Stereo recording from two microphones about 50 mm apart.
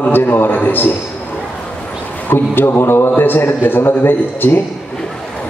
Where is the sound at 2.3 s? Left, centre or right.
Left.